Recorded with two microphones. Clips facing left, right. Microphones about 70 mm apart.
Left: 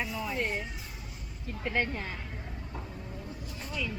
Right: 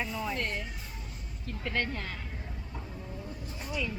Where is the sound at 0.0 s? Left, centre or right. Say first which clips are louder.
Right 1 dB; centre.